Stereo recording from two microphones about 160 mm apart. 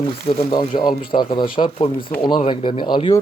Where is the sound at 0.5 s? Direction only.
25° left (ahead or behind).